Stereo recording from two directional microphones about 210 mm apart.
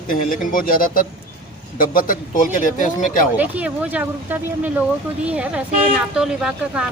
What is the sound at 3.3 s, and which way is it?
Speech, 5° right (ahead or behind).